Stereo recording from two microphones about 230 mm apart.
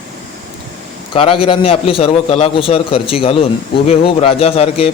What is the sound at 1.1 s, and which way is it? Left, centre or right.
A man's voice, left.